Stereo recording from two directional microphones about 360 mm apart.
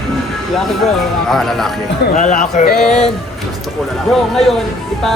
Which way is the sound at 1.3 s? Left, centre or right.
Centre.